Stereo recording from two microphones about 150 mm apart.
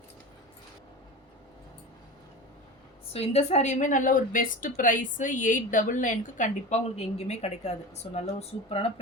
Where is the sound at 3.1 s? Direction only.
45° left (ahead or behind).